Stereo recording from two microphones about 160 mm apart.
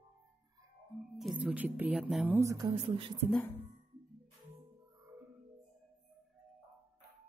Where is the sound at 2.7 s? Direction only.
35° right (ahead or behind).